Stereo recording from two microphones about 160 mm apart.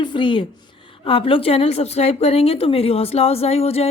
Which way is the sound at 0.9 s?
35° left (ahead or behind).